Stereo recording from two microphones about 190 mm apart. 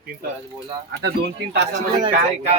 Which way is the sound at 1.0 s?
60° right (ahead or behind).